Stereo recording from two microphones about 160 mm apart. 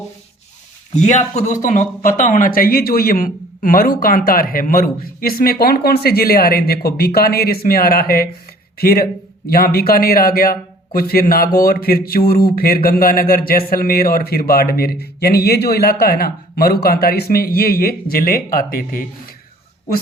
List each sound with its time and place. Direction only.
0.9 s speech: 50° left (ahead or behind)
2.6 s a man's voice: 65° left (ahead or behind)
9.5 s a man's voice: 70° left (ahead or behind)